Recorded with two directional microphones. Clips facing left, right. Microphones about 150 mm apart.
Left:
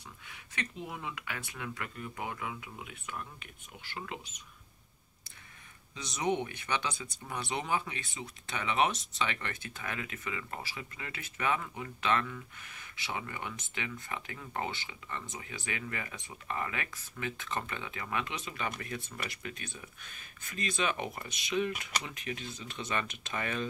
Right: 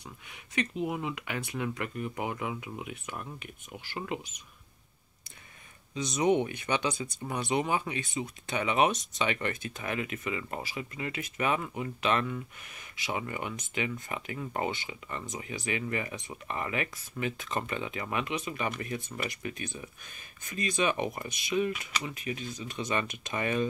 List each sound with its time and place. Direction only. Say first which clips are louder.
0.8 s speech: right 7 dB; 20° right (ahead or behind)
5.9 s speech: right 6 dB; 15° right (ahead or behind)